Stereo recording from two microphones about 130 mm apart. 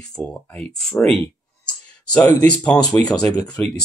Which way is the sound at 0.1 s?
5° left (ahead or behind).